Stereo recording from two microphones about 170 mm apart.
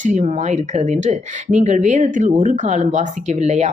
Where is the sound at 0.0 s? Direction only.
45° right (ahead or behind).